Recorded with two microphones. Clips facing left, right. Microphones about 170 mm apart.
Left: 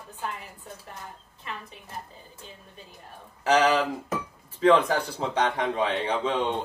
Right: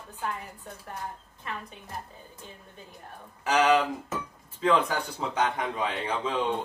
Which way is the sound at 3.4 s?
30° left (ahead or behind).